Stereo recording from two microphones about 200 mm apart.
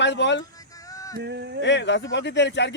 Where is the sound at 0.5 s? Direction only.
15° left (ahead or behind).